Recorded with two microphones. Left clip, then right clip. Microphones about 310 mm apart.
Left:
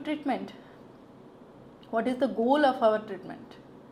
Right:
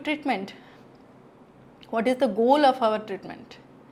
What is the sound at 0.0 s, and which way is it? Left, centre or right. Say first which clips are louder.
Speech: right 4 dB; right.